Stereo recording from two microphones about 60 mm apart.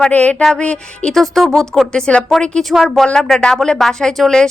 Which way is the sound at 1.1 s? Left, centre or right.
Centre.